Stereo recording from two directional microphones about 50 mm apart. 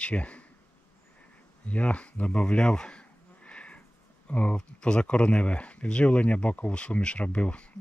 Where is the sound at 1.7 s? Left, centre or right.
Left.